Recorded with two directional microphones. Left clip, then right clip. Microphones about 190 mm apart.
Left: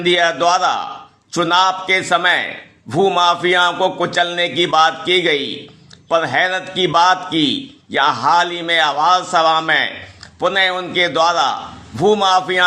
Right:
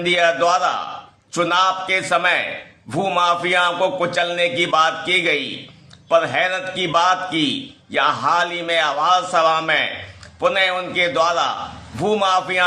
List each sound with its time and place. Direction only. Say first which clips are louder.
0.0 s a man's voice: left 2 dB; 20° left (ahead or behind)